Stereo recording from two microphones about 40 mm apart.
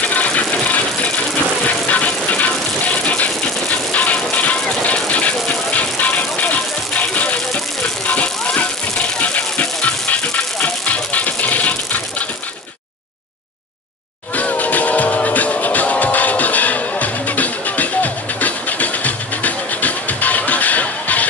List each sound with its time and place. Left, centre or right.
0.0 s music: left
8.5 s music: left
14.3 s music: left